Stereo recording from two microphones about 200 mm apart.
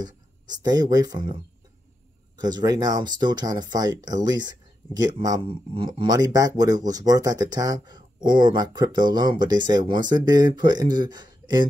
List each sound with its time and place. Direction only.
0.0 s speech: 20° right (ahead or behind)
2.4 s speech: 20° right (ahead or behind)